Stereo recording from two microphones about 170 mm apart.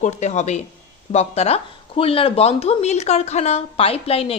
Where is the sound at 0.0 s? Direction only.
40° left (ahead or behind).